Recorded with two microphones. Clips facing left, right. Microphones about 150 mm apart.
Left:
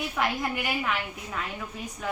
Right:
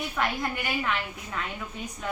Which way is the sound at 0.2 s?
10° left (ahead or behind).